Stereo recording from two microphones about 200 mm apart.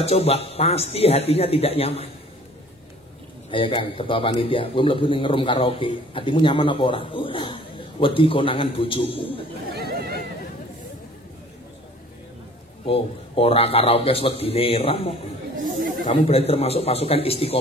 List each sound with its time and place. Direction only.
0.0 s speech: 30° left (ahead or behind)
3.4 s a man's voice: 25° left (ahead or behind)
9.7 s a sound: 50° right (ahead or behind)
12.8 s a man's voice: 30° left (ahead or behind)